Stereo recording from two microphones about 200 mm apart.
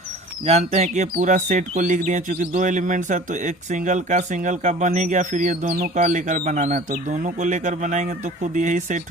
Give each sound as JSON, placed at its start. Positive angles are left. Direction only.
{"t": 0.4, "sound": "speech", "side_deg": -30}